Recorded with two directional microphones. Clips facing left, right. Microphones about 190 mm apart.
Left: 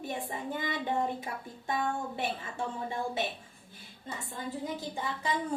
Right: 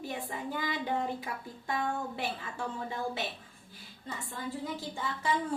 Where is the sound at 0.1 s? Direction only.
25° left (ahead or behind).